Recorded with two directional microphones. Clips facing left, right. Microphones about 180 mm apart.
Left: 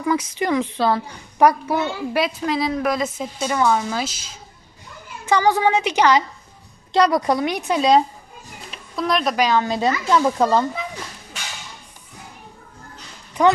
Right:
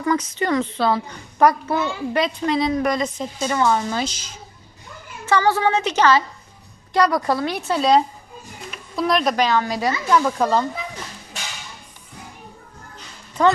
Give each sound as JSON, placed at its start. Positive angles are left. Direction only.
{"t": 0.0, "sound": "a woman's voice", "side_deg": 10}
{"t": 5.2, "sound": "a woman's voice", "side_deg": 15}
{"t": 9.0, "sound": "a child's voice", "side_deg": 0}
{"t": 9.4, "sound": "a woman's voice", "side_deg": 15}
{"t": 13.4, "sound": "a woman's voice", "side_deg": 15}